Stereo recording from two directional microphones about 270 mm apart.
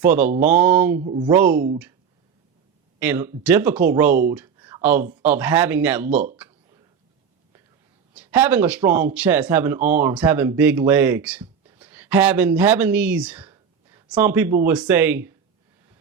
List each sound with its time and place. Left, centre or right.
0.0 s speech: centre
1.5 s speech: right
3.0 s speech: centre
4.6 s a sound: centre
5.2 s speech: centre
8.1 s speech: centre